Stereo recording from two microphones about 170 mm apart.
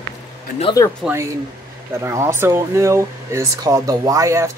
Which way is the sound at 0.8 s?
15° left (ahead or behind).